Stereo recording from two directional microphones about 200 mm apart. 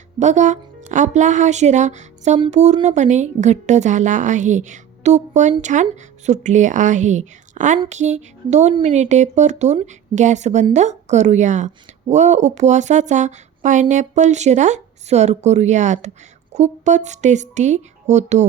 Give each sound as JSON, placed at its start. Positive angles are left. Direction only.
{"t": 0.2, "sound": "speech", "side_deg": -35}